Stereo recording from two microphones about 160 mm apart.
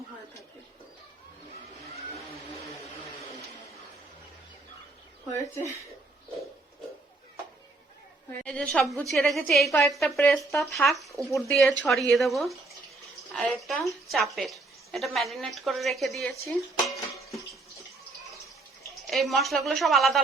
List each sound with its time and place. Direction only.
5.5 s speech: 20° left (ahead or behind)
8.4 s a woman's voice: 5° left (ahead or behind)
16.8 s a sound: centre (ahead or behind)
19.0 s a woman's voice: centre (ahead or behind)